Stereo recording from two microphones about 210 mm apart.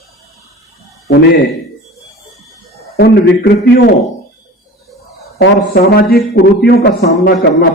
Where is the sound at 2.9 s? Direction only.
50° left (ahead or behind).